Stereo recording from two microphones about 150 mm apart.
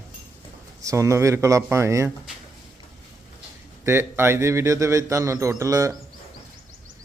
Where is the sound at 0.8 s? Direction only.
20° right (ahead or behind).